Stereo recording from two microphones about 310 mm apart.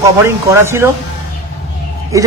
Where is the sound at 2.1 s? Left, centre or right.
Centre.